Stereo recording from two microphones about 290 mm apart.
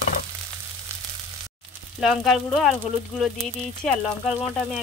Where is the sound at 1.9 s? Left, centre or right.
Centre.